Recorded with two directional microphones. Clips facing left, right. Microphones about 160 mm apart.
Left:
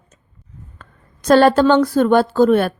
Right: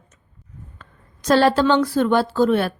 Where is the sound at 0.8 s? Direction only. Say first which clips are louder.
Left 4 dB; 50° left (ahead or behind).